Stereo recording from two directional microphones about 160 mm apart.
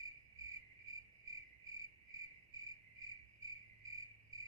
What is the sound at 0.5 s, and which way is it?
Cricket, 20° right (ahead or behind).